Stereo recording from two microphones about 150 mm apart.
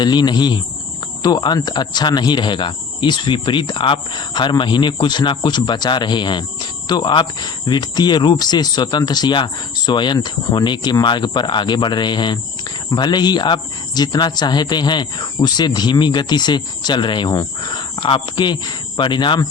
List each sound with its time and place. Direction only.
0.0 s speech: 30° left (ahead or behind)